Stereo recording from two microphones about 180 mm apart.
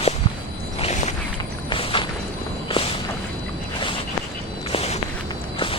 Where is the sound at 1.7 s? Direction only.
30° left (ahead or behind).